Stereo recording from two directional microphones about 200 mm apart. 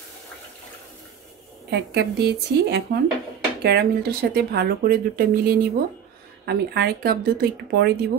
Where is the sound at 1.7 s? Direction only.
55° right (ahead or behind).